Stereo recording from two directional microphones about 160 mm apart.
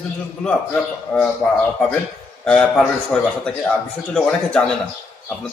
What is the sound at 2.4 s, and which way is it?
A man's voice, 5° left (ahead or behind).